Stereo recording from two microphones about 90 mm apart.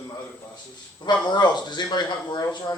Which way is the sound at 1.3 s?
55° left (ahead or behind).